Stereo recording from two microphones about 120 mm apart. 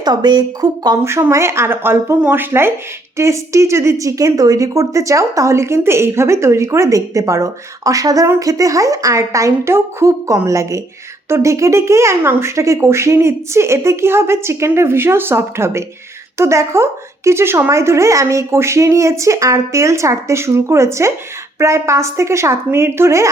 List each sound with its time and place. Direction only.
0.0 s speech: 35° right (ahead or behind)
1.0 s a woman's voice: 20° right (ahead or behind)